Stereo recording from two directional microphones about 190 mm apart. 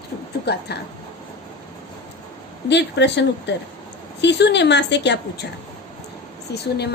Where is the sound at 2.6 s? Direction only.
65° left (ahead or behind).